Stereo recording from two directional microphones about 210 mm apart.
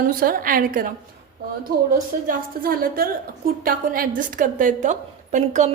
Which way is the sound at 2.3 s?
45° right (ahead or behind).